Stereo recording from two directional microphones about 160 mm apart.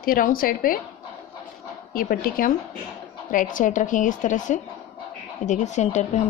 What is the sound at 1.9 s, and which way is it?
Speech, 65° left (ahead or behind).